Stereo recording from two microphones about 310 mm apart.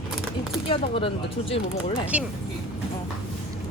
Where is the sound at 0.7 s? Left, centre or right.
Centre.